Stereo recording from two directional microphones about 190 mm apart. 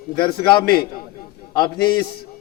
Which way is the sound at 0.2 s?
25° left (ahead or behind).